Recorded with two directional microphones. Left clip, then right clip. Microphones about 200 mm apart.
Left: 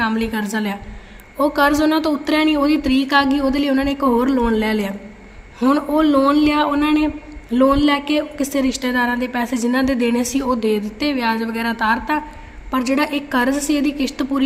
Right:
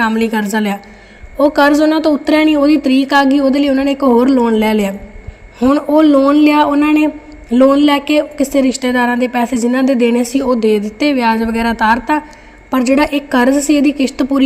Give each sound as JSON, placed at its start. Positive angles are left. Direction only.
{"t": 0.0, "sound": "a woman's voice", "side_deg": -30}